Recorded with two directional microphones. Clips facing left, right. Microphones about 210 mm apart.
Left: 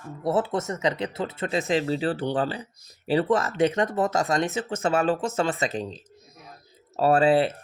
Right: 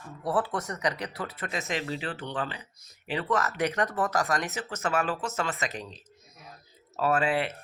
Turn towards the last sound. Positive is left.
turn(degrees=30)  # may be behind; listen again after turning